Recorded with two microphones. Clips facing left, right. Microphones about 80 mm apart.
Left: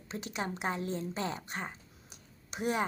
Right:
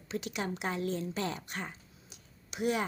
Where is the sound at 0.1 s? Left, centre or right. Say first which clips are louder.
Right 1 dB; left.